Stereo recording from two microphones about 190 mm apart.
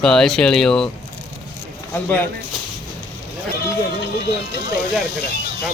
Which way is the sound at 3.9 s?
60° left (ahead or behind).